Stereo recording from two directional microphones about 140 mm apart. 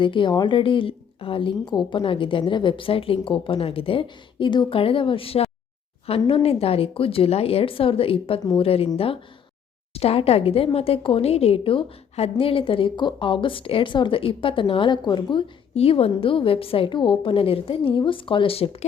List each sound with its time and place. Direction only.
0.0 s speech: 35° left (ahead or behind)
9.9 s speech: 45° left (ahead or behind)